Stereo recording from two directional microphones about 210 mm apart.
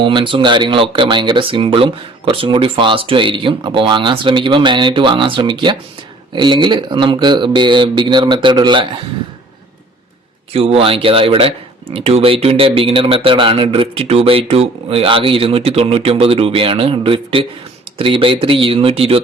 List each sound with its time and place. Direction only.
0.0 s speech: 25° right (ahead or behind)
10.5 s speech: 25° right (ahead or behind)